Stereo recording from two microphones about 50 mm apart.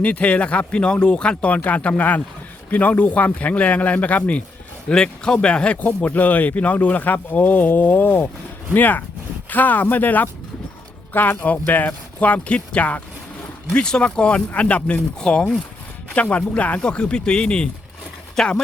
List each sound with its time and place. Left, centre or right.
0.0 s a man's voice: left
4.9 s speech: centre; by 11.3 s left
11.3 s a man's voice: left
11.6 s speech: left
13.7 s a man's voice: centre
18.4 s speech: centre